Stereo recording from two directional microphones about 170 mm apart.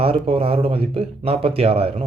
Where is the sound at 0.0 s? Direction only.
35° right (ahead or behind).